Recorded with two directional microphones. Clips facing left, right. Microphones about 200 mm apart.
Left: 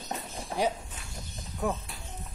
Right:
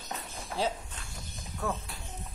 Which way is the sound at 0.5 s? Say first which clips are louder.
Left 3 dB; 15° left (ahead or behind).